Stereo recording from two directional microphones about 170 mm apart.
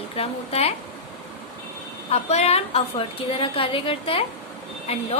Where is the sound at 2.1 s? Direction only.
40° left (ahead or behind).